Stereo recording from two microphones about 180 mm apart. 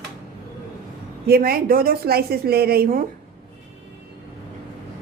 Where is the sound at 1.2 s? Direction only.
60° right (ahead or behind).